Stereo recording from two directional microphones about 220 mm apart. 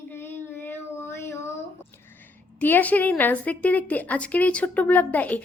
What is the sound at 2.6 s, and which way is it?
A woman's voice, 10° left (ahead or behind).